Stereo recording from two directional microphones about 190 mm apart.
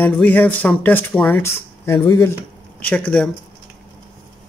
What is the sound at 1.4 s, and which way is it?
Speech, 15° left (ahead or behind).